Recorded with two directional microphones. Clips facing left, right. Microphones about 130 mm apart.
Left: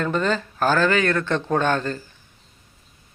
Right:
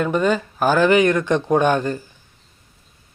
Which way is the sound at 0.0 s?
15° right (ahead or behind).